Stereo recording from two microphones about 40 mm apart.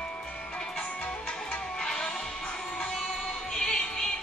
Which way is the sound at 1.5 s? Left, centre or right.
Centre.